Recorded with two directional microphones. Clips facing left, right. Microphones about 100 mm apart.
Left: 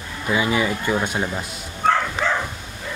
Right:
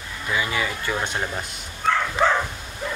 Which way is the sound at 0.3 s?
20° left (ahead or behind).